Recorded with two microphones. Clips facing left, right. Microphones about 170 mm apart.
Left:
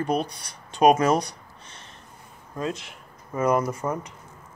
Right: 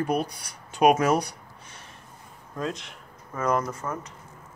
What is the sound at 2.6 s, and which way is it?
Speech, 5° left (ahead or behind).